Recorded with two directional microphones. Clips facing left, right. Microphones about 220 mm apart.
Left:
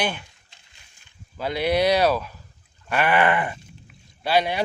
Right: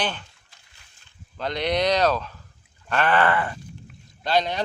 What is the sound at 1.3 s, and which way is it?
Speech, 5° left (ahead or behind).